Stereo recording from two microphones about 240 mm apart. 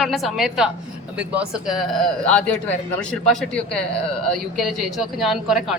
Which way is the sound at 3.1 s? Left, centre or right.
Centre.